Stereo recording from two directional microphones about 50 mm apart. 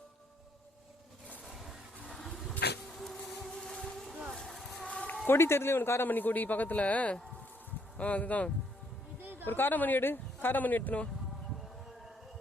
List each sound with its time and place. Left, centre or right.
1.5 s a sound: centre
3.0 s vehicle: centre
5.3 s a man's voice: left
6.1 s speech: left
9.2 s a sound: right
9.5 s speech: left